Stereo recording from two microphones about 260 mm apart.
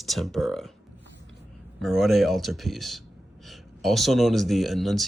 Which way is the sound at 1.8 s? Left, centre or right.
Centre.